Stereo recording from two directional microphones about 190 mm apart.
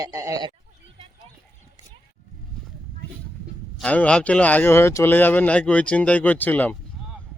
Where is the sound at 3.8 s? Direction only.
5° left (ahead or behind).